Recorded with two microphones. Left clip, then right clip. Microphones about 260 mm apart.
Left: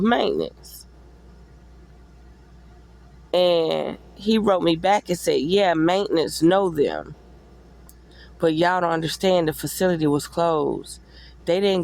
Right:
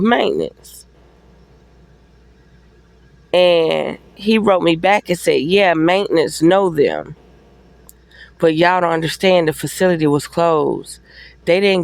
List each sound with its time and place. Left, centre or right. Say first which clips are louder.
0.0 s speech: right 5 dB; right
3.3 s speech: right 6 dB; right
8.1 s speech: right 6 dB; right